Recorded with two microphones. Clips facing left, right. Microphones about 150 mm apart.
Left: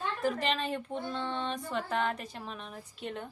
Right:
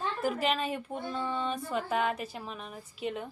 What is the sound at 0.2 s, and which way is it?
Speech, 5° right (ahead or behind).